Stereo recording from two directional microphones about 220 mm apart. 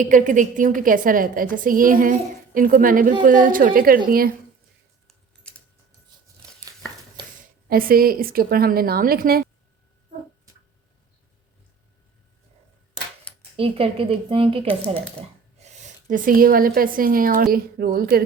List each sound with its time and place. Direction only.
0.0 s a woman's voice: 35° right (ahead or behind)
5.0 s a sound: 5° left (ahead or behind)
7.7 s a woman's voice: 40° right (ahead or behind)
13.6 s speech: 25° right (ahead or behind); by 18.2 s 40° right (ahead or behind)